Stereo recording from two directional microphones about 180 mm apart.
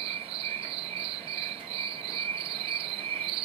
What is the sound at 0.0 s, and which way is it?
Cricket, 30° right (ahead or behind).